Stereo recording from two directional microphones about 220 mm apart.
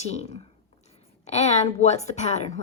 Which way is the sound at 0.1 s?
30° left (ahead or behind).